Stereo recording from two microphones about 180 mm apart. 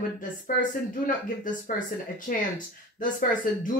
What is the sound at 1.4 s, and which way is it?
A woman's voice, 45° left (ahead or behind).